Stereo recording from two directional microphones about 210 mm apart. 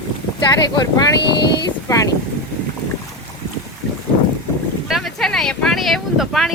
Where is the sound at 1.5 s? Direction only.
15° left (ahead or behind).